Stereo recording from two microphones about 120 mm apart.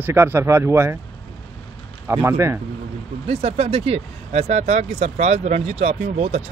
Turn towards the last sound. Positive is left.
turn(degrees=-70)  # may be behind; listen again after turning